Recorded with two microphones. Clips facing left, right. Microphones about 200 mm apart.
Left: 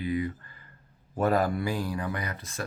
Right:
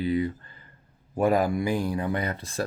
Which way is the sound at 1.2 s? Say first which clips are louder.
Right 3 dB; 15° right (ahead or behind).